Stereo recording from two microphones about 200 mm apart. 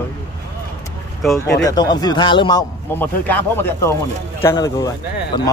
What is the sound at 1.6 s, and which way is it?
A man's voice, 20° left (ahead or behind).